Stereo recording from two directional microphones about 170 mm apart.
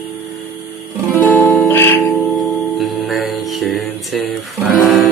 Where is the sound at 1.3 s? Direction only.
10° left (ahead or behind).